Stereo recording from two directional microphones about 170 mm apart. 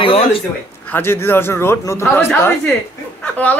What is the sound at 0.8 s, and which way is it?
A woman's voice, 10° left (ahead or behind).